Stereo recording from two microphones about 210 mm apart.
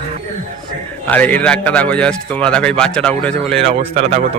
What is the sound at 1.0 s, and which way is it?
A man's voice, 5° left (ahead or behind).